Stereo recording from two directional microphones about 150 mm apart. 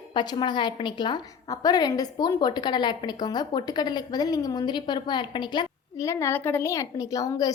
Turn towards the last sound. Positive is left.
turn(degrees=25)  # may be behind; listen again after turning